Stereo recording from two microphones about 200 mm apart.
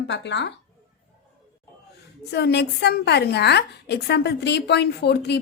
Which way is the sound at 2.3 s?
55° left (ahead or behind).